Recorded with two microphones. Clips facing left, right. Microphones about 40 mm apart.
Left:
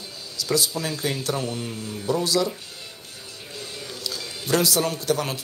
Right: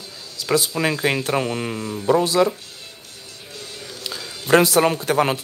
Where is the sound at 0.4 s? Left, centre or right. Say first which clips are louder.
Right 3 dB; right.